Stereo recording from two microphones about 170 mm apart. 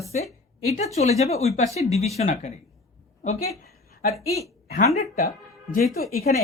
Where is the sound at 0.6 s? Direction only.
40° left (ahead or behind).